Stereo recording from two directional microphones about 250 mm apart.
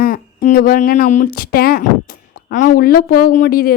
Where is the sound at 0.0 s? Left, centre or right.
Left.